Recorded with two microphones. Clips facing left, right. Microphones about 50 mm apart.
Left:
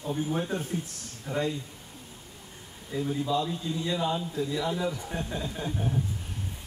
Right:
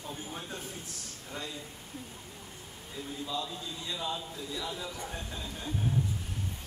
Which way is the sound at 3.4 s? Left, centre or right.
Left.